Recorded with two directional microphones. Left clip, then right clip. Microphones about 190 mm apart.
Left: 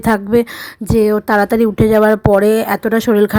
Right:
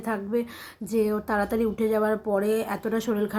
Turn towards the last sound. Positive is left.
turn(degrees=55)  # may be behind; listen again after turning